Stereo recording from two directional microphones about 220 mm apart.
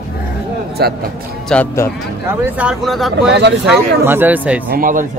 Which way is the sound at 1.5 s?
10° left (ahead or behind).